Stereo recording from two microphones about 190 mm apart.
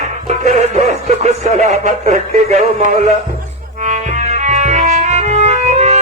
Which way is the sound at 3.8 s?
40° right (ahead or behind).